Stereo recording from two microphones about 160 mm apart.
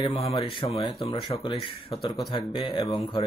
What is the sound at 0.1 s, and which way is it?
Speech, 40° left (ahead or behind).